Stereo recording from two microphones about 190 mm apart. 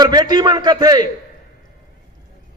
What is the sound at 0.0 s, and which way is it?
A man's voice, 20° right (ahead or behind).